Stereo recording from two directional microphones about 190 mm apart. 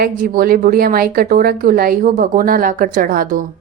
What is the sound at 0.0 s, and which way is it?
A woman's voice, 50° right (ahead or behind).